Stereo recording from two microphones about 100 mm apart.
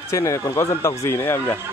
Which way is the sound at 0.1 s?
30° left (ahead or behind).